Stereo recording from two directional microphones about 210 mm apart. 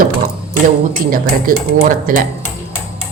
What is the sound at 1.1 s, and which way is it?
Speech, 40° right (ahead or behind).